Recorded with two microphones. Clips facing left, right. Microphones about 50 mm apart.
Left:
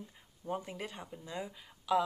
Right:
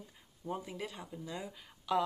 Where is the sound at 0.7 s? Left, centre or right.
Left.